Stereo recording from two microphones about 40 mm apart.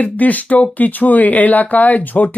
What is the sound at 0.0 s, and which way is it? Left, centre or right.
Speech, left.